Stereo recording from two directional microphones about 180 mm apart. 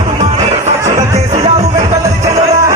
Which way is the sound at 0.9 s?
15° right (ahead or behind).